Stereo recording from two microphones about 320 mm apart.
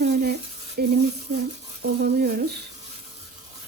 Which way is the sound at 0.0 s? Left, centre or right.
Right.